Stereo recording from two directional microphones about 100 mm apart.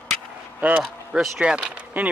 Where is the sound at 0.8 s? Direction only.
5° right (ahead or behind).